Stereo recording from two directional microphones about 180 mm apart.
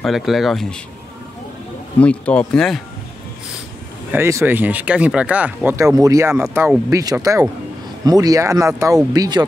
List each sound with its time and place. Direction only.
0.0 s speech: centre (ahead or behind)
2.0 s speech: 5° left (ahead or behind)
4.1 s speech: 15° right (ahead or behind)